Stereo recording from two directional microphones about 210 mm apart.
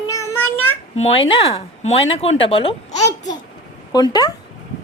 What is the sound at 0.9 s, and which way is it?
Speech, 30° left (ahead or behind).